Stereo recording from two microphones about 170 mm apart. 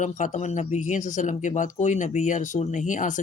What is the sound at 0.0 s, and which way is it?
Speech, 45° left (ahead or behind).